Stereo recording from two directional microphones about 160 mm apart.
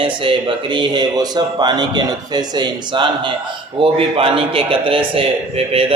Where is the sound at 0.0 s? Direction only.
30° right (ahead or behind).